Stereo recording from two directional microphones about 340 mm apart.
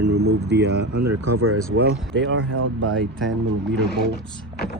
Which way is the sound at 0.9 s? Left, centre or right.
Right.